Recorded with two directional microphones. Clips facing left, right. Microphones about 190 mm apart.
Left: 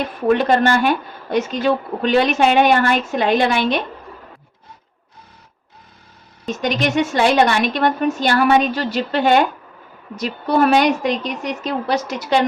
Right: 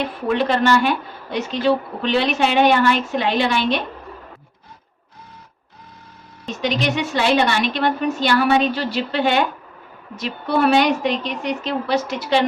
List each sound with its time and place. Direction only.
0.3 s a woman's voice: 45° left (ahead or behind)
6.6 s a woman's voice: 45° left (ahead or behind)